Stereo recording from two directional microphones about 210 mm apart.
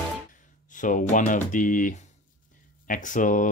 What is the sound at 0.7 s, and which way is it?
Speech, 40° left (ahead or behind).